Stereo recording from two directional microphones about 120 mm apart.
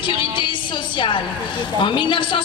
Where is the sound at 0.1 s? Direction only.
45° left (ahead or behind).